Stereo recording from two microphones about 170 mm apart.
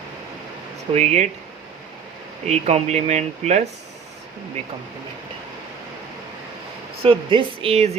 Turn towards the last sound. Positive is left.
turn(degrees=-35)  # may be behind; listen again after turning